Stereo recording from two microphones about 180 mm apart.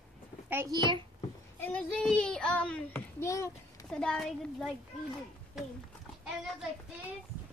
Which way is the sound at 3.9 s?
5° left (ahead or behind).